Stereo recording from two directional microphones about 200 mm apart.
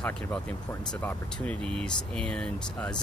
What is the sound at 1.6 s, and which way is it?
Speech, 30° right (ahead or behind).